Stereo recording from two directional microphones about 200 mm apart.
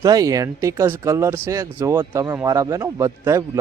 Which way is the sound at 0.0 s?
20° right (ahead or behind).